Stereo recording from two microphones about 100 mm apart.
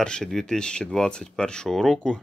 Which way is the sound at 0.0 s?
5° left (ahead or behind).